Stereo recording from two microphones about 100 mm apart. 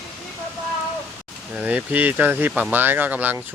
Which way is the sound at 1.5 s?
15° right (ahead or behind).